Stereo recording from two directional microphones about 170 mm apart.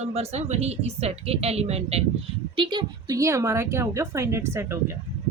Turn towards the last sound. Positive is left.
turn(degrees=-15)  # may be behind; listen again after turning